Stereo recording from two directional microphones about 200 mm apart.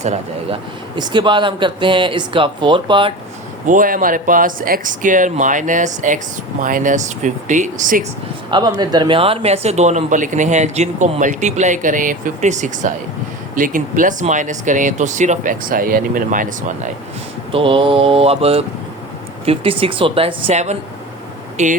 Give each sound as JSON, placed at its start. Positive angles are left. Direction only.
{"t": 0.5, "sound": "speech", "side_deg": -25}
{"t": 3.7, "sound": "speech", "side_deg": -40}
{"t": 8.4, "sound": "speech", "side_deg": -20}
{"t": 17.5, "sound": "speech", "side_deg": -25}